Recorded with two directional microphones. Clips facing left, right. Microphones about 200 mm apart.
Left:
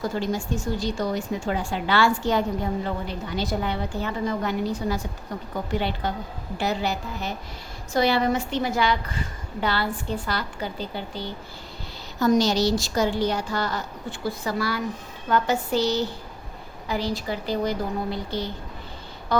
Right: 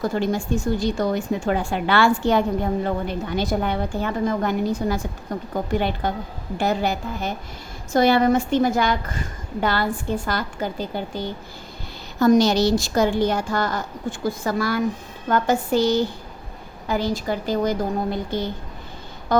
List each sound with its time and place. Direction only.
0.0 s a woman's voice: 55° right (ahead or behind)